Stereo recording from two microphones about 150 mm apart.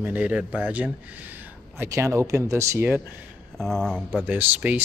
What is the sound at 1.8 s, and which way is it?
Speech, 20° right (ahead or behind).